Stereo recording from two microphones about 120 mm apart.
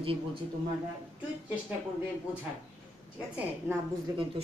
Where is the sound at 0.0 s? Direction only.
50° right (ahead or behind).